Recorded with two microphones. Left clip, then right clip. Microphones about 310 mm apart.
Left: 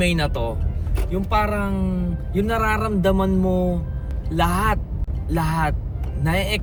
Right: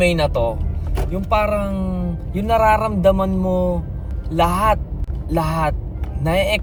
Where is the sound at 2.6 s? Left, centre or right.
Centre.